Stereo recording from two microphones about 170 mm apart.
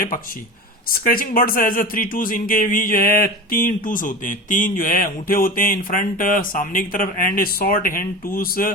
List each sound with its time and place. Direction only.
0.9 s speech: 60° left (ahead or behind)